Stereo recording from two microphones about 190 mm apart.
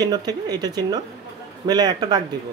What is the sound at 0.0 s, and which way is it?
Speech, 20° right (ahead or behind).